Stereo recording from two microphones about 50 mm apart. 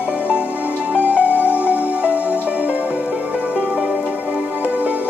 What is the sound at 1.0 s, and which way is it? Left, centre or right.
Music, right.